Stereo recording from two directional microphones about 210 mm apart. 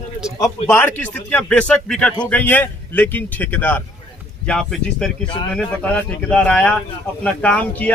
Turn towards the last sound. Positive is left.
turn(degrees=5)  # may be behind; listen again after turning